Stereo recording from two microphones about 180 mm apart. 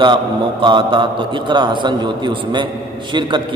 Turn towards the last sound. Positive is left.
turn(degrees=-25)  # may be behind; listen again after turning